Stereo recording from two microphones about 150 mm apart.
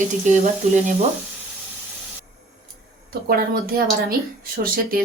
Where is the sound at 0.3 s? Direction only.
55° right (ahead or behind).